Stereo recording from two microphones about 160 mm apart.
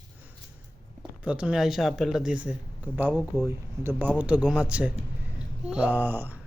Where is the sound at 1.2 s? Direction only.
5° right (ahead or behind).